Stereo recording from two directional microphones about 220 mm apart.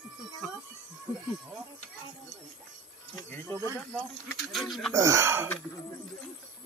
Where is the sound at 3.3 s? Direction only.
10° left (ahead or behind).